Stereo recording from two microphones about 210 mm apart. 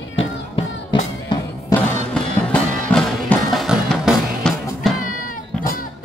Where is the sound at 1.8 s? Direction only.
5° left (ahead or behind).